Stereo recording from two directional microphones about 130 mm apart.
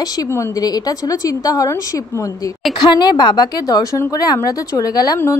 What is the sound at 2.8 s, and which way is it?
A woman's voice, 35° left (ahead or behind).